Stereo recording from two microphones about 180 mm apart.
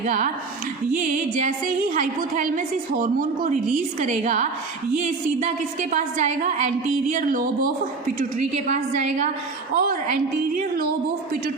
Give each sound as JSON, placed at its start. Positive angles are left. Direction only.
{"t": 0.0, "sound": "a woman's voice", "side_deg": -40}
{"t": 8.7, "sound": "a woman's voice", "side_deg": -40}